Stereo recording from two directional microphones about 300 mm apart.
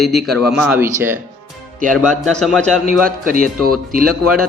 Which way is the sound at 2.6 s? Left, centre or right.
Right.